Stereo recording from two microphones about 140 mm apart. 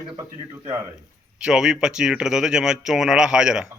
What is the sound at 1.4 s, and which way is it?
Speech, 5° right (ahead or behind).